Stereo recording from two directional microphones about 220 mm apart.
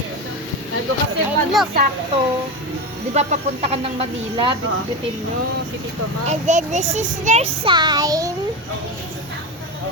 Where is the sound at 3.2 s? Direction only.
30° right (ahead or behind).